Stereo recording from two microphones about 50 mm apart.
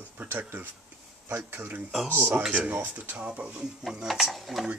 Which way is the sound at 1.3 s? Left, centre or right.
Right.